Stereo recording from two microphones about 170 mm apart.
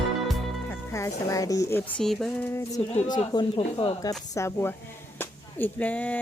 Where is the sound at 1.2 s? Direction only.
20° left (ahead or behind).